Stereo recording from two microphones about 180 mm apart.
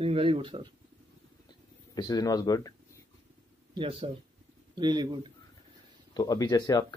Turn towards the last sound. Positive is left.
turn(degrees=20)  # may be behind; listen again after turning